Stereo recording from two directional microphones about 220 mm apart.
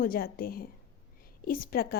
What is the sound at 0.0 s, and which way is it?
A woman's voice, 40° left (ahead or behind).